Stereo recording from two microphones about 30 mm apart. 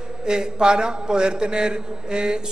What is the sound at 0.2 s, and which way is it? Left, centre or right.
Mantra, right.